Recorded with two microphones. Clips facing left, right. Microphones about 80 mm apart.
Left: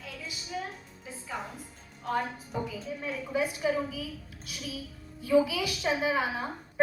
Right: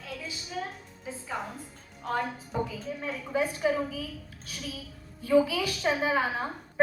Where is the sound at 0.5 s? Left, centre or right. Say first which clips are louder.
Right 1 dB; right.